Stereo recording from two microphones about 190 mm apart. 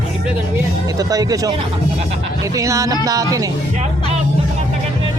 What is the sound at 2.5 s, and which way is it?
Speech, 15° right (ahead or behind).